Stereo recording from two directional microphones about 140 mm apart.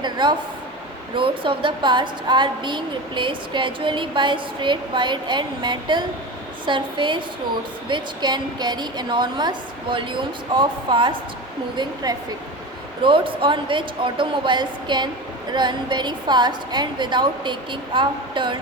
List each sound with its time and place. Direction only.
0.0 s a woman's voice: 30° right (ahead or behind)